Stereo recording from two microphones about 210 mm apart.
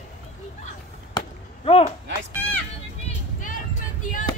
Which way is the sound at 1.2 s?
25° left (ahead or behind).